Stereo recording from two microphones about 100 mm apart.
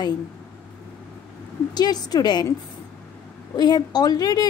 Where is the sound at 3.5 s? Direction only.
45° left (ahead or behind).